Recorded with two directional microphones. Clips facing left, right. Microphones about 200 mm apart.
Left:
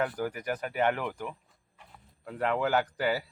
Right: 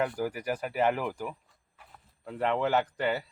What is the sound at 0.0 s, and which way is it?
Speech, centre (ahead or behind).